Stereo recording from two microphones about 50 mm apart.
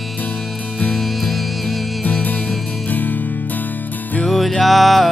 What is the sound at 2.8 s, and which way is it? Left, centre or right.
Music, left.